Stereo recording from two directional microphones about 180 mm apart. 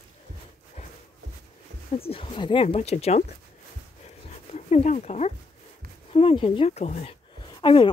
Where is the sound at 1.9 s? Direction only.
30° left (ahead or behind).